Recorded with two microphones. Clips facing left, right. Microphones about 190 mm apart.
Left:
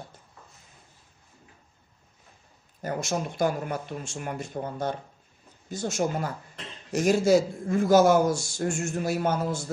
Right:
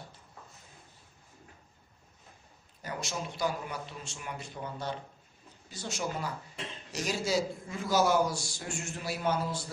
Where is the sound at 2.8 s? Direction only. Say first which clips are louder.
Left 8 dB; 50° left (ahead or behind).